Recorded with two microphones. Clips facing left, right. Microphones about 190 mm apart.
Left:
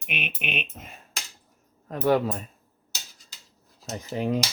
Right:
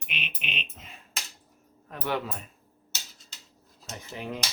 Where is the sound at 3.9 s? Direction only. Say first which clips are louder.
Left 9 dB; 40° left (ahead or behind).